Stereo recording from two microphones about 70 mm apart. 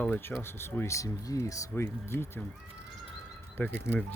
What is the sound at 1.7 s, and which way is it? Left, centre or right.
Speech, left.